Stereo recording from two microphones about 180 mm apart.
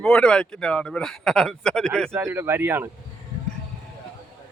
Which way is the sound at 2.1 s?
15° right (ahead or behind).